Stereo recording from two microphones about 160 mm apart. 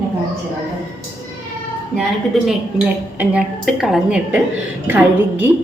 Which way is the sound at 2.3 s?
Centre (ahead or behind).